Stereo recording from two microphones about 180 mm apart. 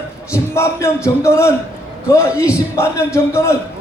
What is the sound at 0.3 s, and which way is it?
Speech, 15° left (ahead or behind).